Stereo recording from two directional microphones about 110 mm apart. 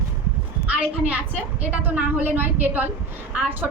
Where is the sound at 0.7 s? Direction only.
15° right (ahead or behind).